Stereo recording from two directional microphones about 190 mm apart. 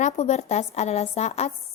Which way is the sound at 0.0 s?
35° left (ahead or behind).